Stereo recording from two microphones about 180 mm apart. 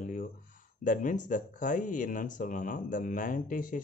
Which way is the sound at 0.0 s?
45° left (ahead or behind).